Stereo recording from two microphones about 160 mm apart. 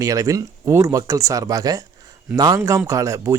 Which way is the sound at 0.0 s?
20° right (ahead or behind).